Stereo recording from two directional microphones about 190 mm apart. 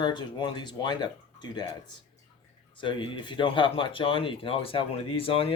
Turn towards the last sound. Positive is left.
turn(degrees=30)  # may be behind; listen again after turning